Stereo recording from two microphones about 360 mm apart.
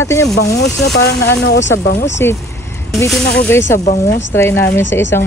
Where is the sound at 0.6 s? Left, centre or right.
Left.